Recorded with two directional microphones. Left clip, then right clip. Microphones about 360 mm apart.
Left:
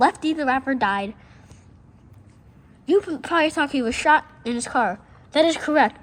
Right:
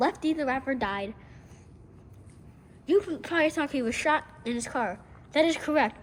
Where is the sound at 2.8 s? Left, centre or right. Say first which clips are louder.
Left 5 dB; left.